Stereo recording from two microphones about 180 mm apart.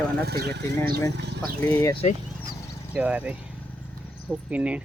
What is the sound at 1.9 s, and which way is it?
Speech, 35° left (ahead or behind).